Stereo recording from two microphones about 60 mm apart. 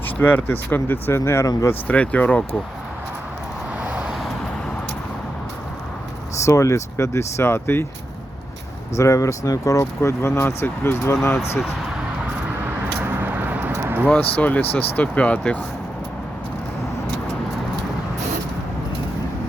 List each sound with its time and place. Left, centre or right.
0.2 s speech: left
1.1 s speech: left
1.9 s speech: left
4.0 s vehicle: centre
6.4 s speech: left
9.0 s speech: left
10.0 s speech: left
10.3 s speech: left
13.2 s vehicle: right
14.2 s speech: left